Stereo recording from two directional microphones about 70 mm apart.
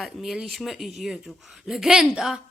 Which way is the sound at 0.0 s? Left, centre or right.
Centre.